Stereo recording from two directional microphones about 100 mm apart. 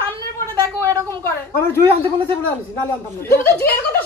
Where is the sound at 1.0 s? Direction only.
25° left (ahead or behind).